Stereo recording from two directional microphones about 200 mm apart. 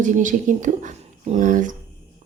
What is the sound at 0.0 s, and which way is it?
A woman's voice, 40° right (ahead or behind).